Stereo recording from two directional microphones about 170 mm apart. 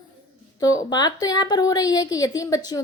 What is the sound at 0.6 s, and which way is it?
A woman's voice, 20° left (ahead or behind).